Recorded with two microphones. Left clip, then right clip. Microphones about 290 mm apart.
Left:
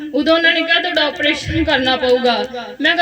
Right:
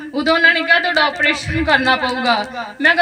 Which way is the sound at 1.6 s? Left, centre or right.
Right.